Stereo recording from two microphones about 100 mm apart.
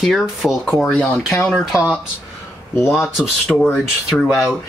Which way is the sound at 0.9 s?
10° left (ahead or behind).